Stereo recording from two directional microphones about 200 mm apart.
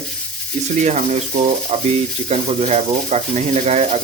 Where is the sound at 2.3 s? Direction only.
35° right (ahead or behind).